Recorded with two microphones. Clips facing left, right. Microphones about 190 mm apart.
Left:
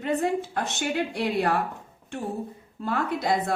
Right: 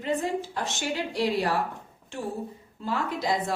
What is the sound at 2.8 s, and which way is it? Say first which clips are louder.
Speech: left 2 dB; 55° left (ahead or behind).